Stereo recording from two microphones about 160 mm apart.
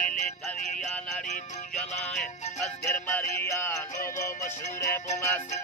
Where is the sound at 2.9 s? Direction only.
10° left (ahead or behind).